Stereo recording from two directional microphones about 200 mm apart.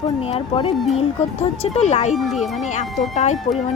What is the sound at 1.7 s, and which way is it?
Speech, 35° left (ahead or behind).